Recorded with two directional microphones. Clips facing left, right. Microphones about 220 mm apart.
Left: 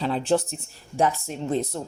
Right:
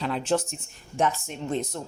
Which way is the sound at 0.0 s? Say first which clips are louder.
Left 3 dB; 35° left (ahead or behind).